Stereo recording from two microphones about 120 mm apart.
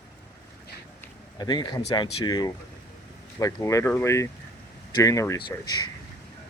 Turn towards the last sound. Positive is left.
turn(degrees=35)  # may be behind; listen again after turning